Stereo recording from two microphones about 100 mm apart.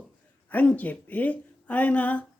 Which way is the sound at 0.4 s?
15° left (ahead or behind).